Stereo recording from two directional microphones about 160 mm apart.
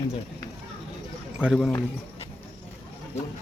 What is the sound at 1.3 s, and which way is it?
Speech, 5° right (ahead or behind).